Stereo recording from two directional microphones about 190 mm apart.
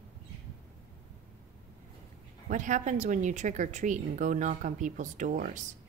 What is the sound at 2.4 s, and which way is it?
A woman's voice, 40° right (ahead or behind).